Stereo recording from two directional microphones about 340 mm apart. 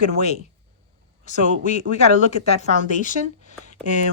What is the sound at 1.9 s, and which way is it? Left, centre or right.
Speech, centre.